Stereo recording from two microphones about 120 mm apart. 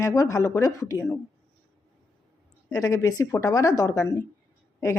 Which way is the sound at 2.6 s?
30° left (ahead or behind).